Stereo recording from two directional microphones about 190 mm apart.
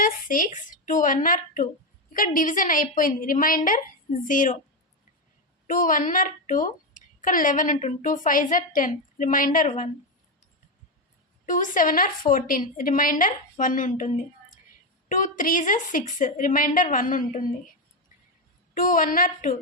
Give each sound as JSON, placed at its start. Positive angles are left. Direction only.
{"t": 0.0, "sound": "a woman's voice", "side_deg": 45}
{"t": 5.6, "sound": "a woman's voice", "side_deg": 45}
{"t": 11.4, "sound": "a woman's voice", "side_deg": 45}
{"t": 15.1, "sound": "a woman's voice", "side_deg": 45}
{"t": 18.7, "sound": "a woman's voice", "side_deg": 45}